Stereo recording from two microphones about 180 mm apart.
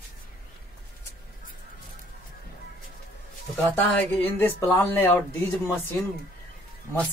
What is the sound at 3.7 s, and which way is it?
Speech, 10° left (ahead or behind).